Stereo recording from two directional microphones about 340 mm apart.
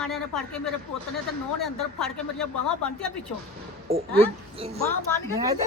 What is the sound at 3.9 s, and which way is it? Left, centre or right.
A woman's voice, right.